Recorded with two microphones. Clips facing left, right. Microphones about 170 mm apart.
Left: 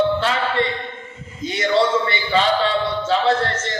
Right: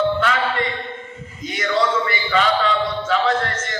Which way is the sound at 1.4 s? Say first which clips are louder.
Left 2 dB; 30° left (ahead or behind).